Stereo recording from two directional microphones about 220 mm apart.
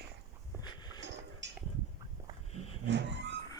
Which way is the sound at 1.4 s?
55° right (ahead or behind).